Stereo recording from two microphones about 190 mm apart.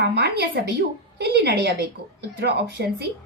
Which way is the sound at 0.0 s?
60° right (ahead or behind).